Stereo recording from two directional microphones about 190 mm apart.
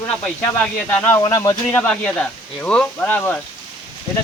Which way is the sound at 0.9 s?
10° left (ahead or behind).